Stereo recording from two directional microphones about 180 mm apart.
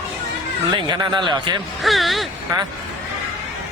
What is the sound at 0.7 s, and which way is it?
Speech, 25° right (ahead or behind).